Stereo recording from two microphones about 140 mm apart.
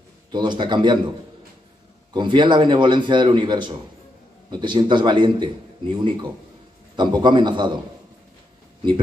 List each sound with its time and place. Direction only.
0.3 s a man's voice: 30° right (ahead or behind)
2.1 s a man's voice: 35° right (ahead or behind)